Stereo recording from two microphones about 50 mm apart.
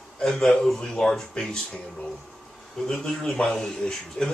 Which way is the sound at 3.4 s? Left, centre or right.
Centre.